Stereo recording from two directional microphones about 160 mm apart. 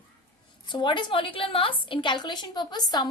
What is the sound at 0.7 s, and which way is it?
A woman's voice, 30° left (ahead or behind).